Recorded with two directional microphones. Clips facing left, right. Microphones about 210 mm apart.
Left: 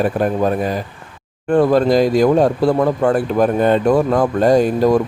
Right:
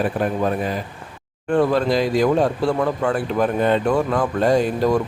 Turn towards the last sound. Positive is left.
turn(degrees=40)  # may be behind; listen again after turning